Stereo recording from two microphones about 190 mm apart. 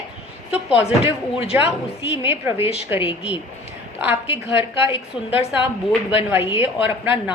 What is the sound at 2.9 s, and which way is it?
Speech, 10° right (ahead or behind).